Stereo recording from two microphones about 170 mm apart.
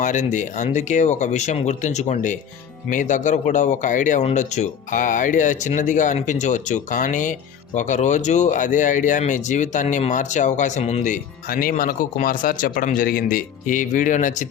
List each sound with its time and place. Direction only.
0.0 s speech: 45° left (ahead or behind)